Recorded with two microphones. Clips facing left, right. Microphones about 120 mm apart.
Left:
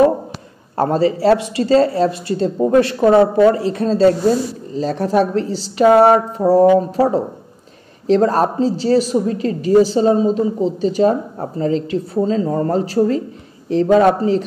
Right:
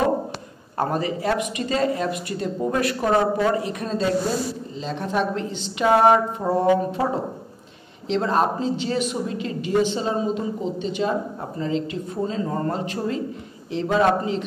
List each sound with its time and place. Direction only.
0.7 s a woman's voice: 30° left (ahead or behind)